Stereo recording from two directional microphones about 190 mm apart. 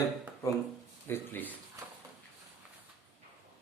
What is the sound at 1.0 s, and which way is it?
Speech, 10° left (ahead or behind).